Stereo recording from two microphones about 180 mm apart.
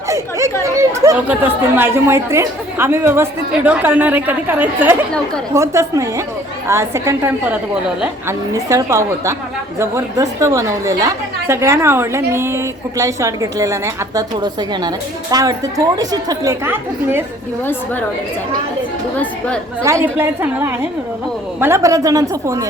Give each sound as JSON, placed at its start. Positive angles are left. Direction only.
{"t": 0.1, "sound": "chatter", "side_deg": -15}
{"t": 0.8, "sound": "speech", "side_deg": -15}
{"t": 19.1, "sound": "speech", "side_deg": 10}
{"t": 19.8, "sound": "a man's voice", "side_deg": -15}